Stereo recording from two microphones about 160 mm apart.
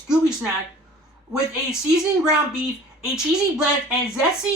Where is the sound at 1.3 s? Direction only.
5° right (ahead or behind).